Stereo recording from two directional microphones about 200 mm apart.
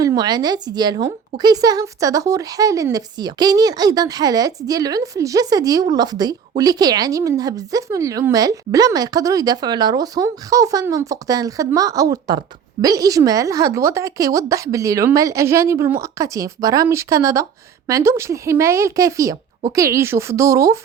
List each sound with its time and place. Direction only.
0.0 s a woman's voice: 20° right (ahead or behind)